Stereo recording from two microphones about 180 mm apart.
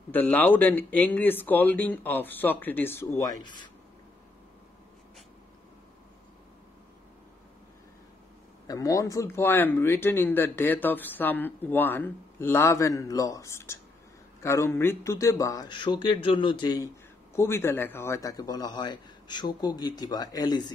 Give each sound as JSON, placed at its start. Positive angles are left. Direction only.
{"t": 0.1, "sound": "speech", "side_deg": 10}
{"t": 8.6, "sound": "speech", "side_deg": 20}